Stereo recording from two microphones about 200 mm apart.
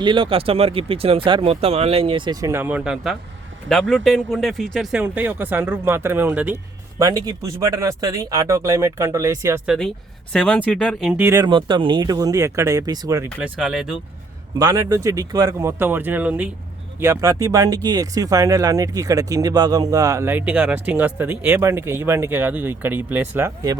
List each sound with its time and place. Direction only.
0.0 s speech: 25° right (ahead or behind)
9.6 s speech: centre (ahead or behind); by 13.2 s 20° right (ahead or behind)
13.4 s speech: 5° right (ahead or behind)
14.6 s speech: 20° right (ahead or behind)